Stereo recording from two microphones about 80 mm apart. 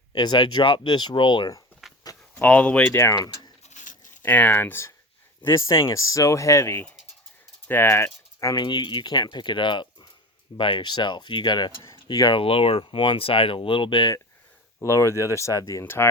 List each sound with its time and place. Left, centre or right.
0.1 s speech: left
1.8 s a sound: centre
2.4 s speech: centre
2.9 s speech: left
4.2 s speech: left
8.5 s speech: left
12.8 s speech: left
14.8 s speech: left
15.8 s speech: left